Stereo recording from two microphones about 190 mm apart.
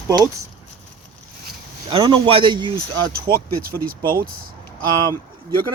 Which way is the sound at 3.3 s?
50° right (ahead or behind).